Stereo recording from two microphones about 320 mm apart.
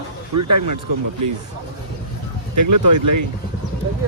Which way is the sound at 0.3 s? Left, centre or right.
Right.